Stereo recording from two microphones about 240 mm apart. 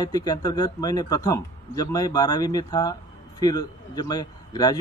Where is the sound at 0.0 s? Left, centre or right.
Centre.